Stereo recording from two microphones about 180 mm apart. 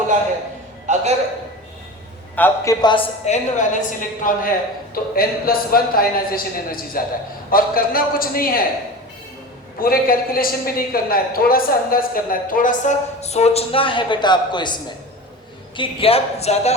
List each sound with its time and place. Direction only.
0.9 s a sound: 40° right (ahead or behind)
2.3 s a man's voice: 10° left (ahead or behind)
2.8 s a woman's voice: 25° left (ahead or behind)
3.2 s a man's voice: 45° left (ahead or behind)
9.8 s a man's voice: 55° left (ahead or behind); by 16.7 s 35° left (ahead or behind)